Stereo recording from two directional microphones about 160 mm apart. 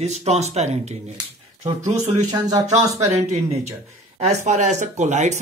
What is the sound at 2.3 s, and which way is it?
Speech, 25° right (ahead or behind).